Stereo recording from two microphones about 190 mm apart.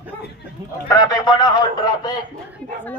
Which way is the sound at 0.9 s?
20° left (ahead or behind).